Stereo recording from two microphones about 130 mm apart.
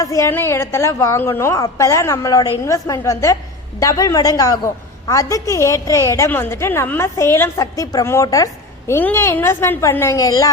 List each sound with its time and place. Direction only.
0.0 s a woman's voice: 25° left (ahead or behind)